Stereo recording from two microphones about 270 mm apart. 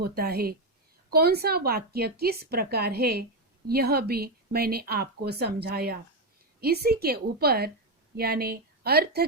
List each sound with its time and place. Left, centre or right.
0.0 s a woman's voice: right